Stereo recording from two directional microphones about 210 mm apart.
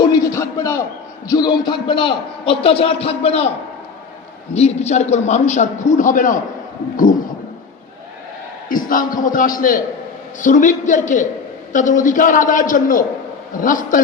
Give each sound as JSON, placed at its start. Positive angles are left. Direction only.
{"t": 0.0, "sound": "a sound", "side_deg": 15}
{"t": 1.3, "sound": "a man's voice", "side_deg": 20}
{"t": 4.5, "sound": "a man's voice", "side_deg": 30}
{"t": 8.7, "sound": "a man's voice", "side_deg": 40}